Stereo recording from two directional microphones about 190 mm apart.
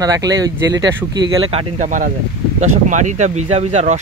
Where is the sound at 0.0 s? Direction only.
20° right (ahead or behind).